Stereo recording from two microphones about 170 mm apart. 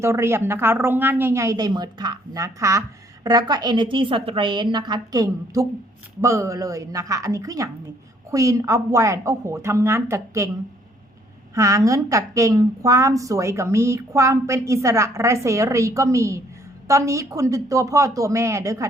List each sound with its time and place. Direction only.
0.0 s a woman's voice: 15° right (ahead or behind)
11.5 s a woman's voice: 20° right (ahead or behind)